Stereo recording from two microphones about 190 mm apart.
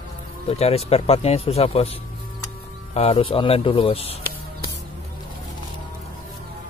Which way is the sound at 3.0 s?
30° left (ahead or behind).